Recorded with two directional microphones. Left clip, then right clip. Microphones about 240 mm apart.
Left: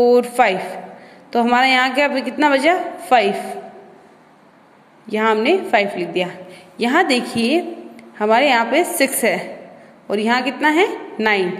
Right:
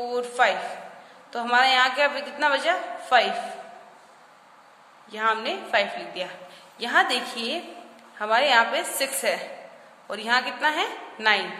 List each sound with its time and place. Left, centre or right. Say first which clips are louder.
0.0 s a woman's voice: left 10 dB; left
5.0 s a woman's voice: left 8 dB; left